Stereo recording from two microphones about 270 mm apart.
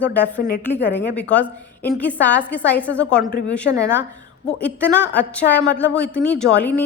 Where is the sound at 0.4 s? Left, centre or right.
Left.